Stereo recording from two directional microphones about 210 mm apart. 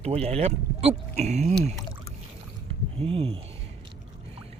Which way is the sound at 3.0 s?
25° right (ahead or behind).